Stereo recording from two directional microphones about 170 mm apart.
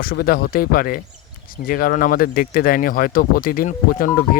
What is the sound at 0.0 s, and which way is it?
Speech, 60° left (ahead or behind).